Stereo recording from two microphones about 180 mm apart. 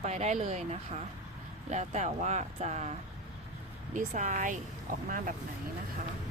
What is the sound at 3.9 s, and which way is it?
Speech, 45° right (ahead or behind).